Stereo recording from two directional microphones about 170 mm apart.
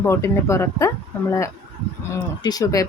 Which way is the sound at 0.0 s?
15° left (ahead or behind).